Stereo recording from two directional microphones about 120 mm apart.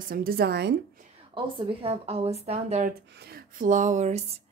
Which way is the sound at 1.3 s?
45° right (ahead or behind).